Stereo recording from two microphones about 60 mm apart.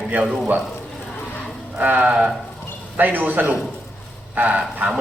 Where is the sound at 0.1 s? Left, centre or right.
Right.